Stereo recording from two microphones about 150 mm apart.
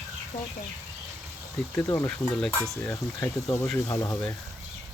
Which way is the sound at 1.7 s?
15° left (ahead or behind).